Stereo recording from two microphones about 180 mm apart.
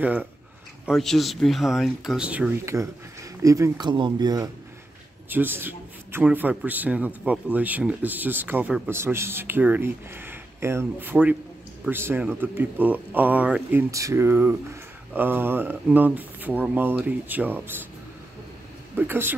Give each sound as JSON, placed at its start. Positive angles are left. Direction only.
{"t": 0.0, "sound": "a man's voice", "side_deg": -10}
{"t": 0.8, "sound": "speech", "side_deg": 0}
{"t": 5.3, "sound": "a man's voice", "side_deg": -10}
{"t": 18.9, "sound": "a man's voice", "side_deg": -10}